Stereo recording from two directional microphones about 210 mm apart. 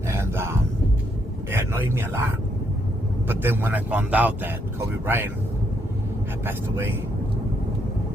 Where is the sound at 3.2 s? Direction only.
10° right (ahead or behind).